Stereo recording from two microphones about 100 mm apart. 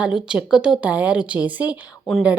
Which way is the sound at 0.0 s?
10° right (ahead or behind).